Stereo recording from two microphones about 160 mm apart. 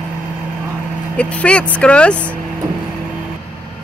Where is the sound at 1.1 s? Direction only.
10° left (ahead or behind).